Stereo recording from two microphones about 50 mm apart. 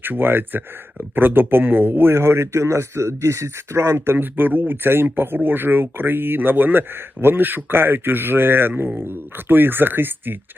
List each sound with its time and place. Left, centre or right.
0.0 s speech: right